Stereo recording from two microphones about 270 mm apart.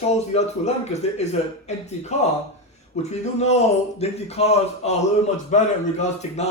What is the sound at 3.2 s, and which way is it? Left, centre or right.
Speech, left.